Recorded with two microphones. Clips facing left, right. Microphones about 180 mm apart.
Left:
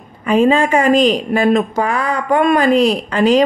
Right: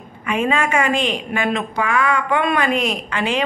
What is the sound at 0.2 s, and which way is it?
A woman's voice, 30° left (ahead or behind).